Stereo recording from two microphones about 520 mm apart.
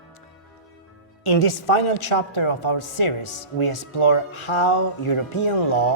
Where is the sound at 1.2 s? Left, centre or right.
Left.